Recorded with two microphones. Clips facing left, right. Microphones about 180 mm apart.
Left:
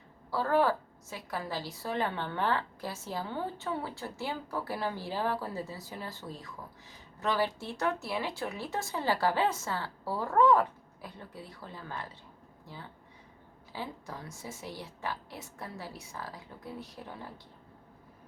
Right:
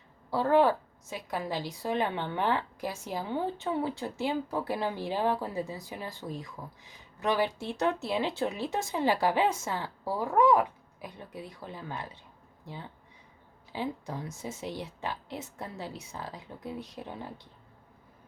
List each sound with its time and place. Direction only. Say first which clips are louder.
0.3 s a woman's voice: right 4 dB; 20° right (ahead or behind)